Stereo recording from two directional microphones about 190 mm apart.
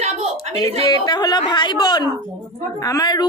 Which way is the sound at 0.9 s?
20° left (ahead or behind).